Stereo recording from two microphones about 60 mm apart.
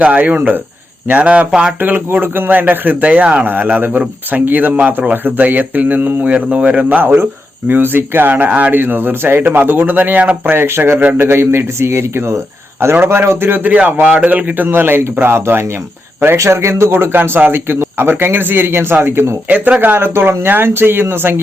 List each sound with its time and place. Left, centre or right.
0.0 s speech: right
2.1 s a man's voice: right
6.2 s a man's voice: right
10.9 s speech: right
11.2 s a man's voice: right
19.5 s speech: right
19.8 s a man's voice: right